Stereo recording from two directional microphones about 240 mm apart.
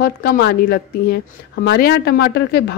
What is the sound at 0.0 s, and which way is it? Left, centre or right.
A woman's voice, left.